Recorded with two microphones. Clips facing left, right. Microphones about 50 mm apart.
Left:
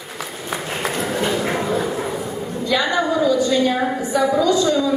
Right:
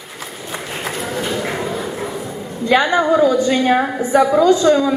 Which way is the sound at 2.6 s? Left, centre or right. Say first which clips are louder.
Right 5 dB; right.